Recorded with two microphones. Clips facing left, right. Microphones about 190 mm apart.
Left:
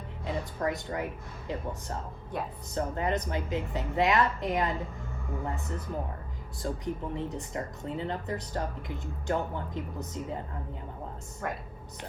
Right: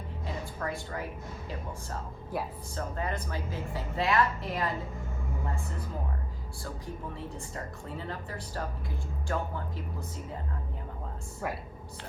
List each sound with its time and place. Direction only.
0.6 s a woman's voice: 20° left (ahead or behind)
2.3 s speech: 5° right (ahead or behind)
2.7 s a woman's voice: 20° left (ahead or behind)
6.6 s a woman's voice: 20° left (ahead or behind)
11.4 s speech: 5° right (ahead or behind)